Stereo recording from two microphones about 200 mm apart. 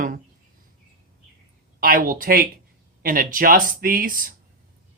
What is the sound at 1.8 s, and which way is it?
Speech, 45° right (ahead or behind).